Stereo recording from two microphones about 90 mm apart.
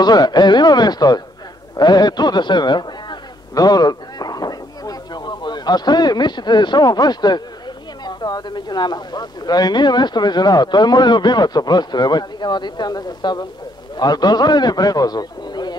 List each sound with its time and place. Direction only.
0.0 s a man's voice: 50° left (ahead or behind)